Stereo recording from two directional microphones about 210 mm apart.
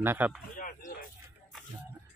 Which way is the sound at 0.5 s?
40° left (ahead or behind).